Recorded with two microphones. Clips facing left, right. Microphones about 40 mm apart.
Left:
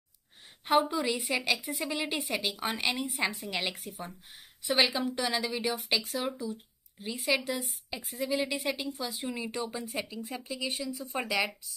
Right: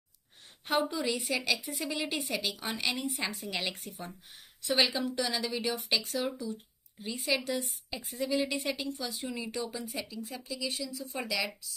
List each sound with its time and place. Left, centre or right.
0.7 s a woman's voice: centre
6.4 s a sound: centre
7.3 s a woman's voice: centre; by 11.5 s left